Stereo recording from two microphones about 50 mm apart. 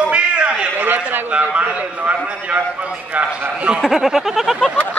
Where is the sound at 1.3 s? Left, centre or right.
Right.